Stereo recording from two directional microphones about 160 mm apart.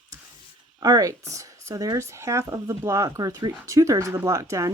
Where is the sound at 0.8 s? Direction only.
25° right (ahead or behind).